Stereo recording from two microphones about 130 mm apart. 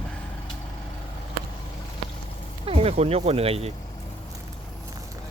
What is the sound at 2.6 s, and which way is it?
Speech, 50° right (ahead or behind).